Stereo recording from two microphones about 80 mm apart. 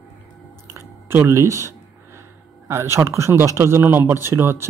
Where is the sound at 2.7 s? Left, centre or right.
Right.